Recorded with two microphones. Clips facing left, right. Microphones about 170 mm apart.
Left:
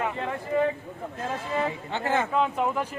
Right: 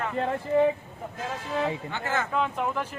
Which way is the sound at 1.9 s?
30° left (ahead or behind).